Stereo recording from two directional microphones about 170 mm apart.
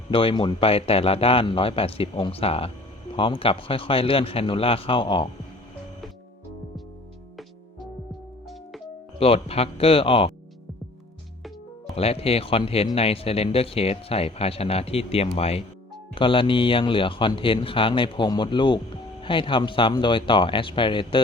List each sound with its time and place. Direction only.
0.1 s speech: 30° left (ahead or behind)
9.1 s speech: 35° left (ahead or behind)
11.9 s speech: 35° left (ahead or behind)